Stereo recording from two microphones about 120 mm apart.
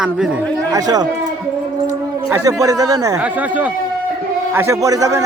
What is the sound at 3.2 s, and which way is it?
Speech, 15° right (ahead or behind).